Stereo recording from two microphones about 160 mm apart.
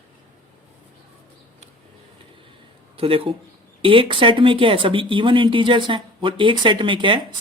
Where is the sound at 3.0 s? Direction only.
35° right (ahead or behind).